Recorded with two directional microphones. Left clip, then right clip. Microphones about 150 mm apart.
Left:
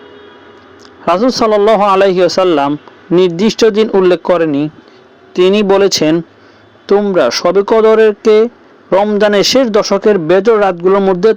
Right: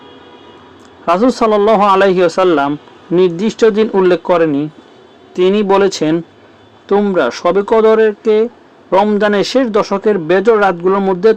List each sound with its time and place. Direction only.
1.0 s speech: 25° left (ahead or behind)